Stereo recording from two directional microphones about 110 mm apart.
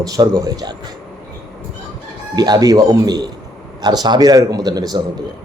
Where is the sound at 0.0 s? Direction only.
30° right (ahead or behind).